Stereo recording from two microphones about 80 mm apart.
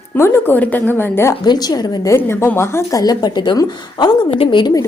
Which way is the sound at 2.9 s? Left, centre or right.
Left.